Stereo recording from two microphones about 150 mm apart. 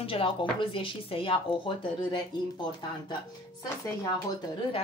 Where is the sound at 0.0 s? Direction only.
40° left (ahead or behind).